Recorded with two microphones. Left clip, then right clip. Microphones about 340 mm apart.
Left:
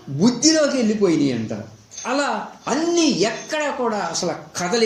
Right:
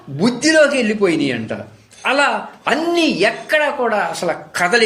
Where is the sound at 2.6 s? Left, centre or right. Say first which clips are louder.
Right 3 dB; right.